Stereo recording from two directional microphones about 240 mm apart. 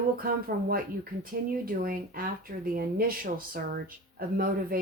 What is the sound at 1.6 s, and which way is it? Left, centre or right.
Speech, right.